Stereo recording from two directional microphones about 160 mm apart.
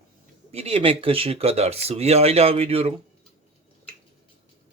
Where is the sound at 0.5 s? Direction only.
35° right (ahead or behind).